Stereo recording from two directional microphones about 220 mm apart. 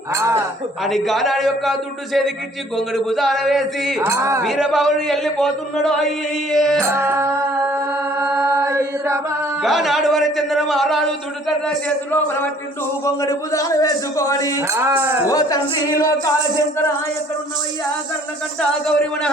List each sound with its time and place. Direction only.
0.1 s speech: 15° right (ahead or behind)
0.9 s a man's voice: centre (ahead or behind)
2.7 s a man's voice: centre (ahead or behind)
4.0 s speech: 15° right (ahead or behind)
4.4 s a man's voice: centre (ahead or behind)
6.9 s speech: 10° right (ahead or behind)
8.2 s chant: 15° right (ahead or behind)
9.6 s a man's voice: centre (ahead or behind); by 14.6 s 15° left (ahead or behind)
14.7 s speech: 10° right (ahead or behind)
15.3 s a man's voice: 15° left (ahead or behind)
18.9 s a man's voice: 5° left (ahead or behind)